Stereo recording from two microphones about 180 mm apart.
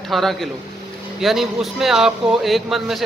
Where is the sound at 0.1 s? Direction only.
Centre (ahead or behind).